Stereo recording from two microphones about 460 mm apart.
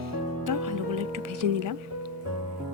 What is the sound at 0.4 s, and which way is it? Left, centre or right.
Music, right.